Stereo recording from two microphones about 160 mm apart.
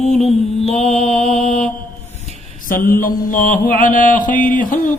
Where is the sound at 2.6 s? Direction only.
65° left (ahead or behind).